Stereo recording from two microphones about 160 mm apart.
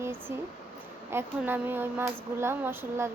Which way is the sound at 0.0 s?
15° right (ahead or behind).